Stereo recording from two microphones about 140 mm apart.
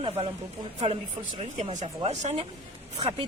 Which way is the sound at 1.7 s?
55° right (ahead or behind).